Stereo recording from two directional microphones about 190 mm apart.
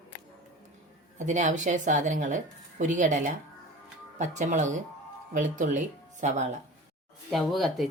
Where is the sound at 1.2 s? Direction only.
40° right (ahead or behind).